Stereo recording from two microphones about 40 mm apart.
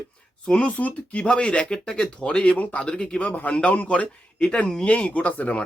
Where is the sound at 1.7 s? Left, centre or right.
Centre.